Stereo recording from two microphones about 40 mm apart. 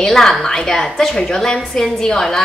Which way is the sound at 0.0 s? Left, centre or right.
Centre.